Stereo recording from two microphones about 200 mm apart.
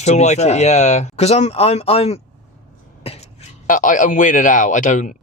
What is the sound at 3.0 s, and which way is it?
Cough, 30° left (ahead or behind).